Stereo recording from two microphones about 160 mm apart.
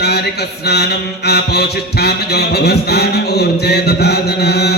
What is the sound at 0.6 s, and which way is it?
Mantra, 90° left.